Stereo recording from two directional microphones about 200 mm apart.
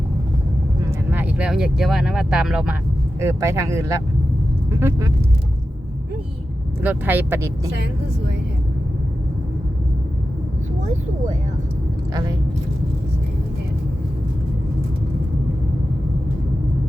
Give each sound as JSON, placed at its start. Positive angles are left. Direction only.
{"t": 1.1, "sound": "speech", "side_deg": -10}
{"t": 6.8, "sound": "speech", "side_deg": -10}